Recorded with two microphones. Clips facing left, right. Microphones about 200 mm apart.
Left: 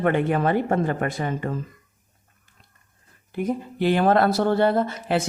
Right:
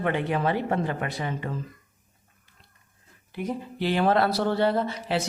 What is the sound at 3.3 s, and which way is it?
A man's voice, 50° left (ahead or behind).